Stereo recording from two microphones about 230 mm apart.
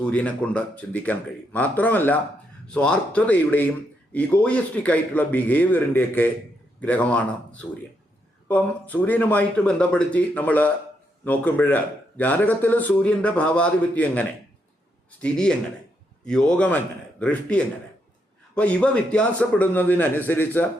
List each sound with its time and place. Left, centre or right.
0.0 s a man's voice: centre